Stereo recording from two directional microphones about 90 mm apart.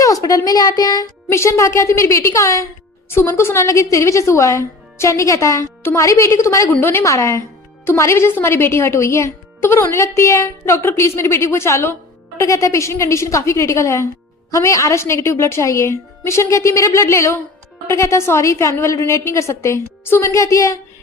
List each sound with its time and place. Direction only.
0.0 s speech: 40° left (ahead or behind)
1.3 s a woman's voice: 30° left (ahead or behind)
6.7 s speech: 25° left (ahead or behind)
7.0 s a woman's voice: 35° left (ahead or behind)